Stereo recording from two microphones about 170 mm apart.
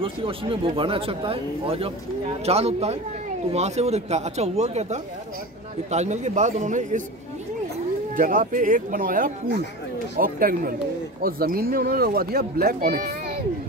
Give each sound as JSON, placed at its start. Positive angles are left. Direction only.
{"t": 0.0, "sound": "speech", "side_deg": -30}
{"t": 8.2, "sound": "speech", "side_deg": -50}